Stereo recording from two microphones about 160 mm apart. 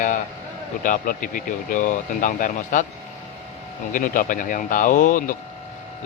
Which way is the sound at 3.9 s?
55° left (ahead or behind).